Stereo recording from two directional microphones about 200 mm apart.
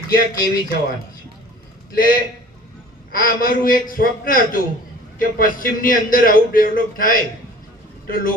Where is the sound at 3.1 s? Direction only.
45° left (ahead or behind).